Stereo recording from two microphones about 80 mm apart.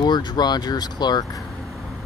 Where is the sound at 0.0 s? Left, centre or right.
Left.